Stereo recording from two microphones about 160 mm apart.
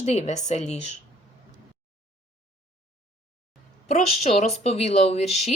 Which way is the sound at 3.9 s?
40° left (ahead or behind).